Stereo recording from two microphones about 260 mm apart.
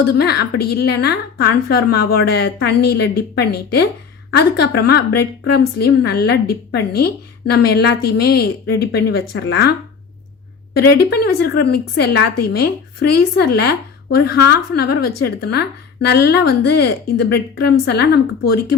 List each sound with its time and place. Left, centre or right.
0.1 s a woman's voice: left
10.8 s a woman's voice: left